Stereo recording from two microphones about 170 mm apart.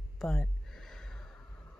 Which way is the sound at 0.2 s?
5° left (ahead or behind).